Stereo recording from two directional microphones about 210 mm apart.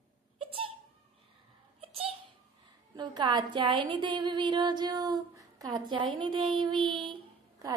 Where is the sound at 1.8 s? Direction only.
30° right (ahead or behind).